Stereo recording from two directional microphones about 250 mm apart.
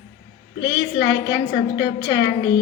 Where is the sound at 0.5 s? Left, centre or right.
Left.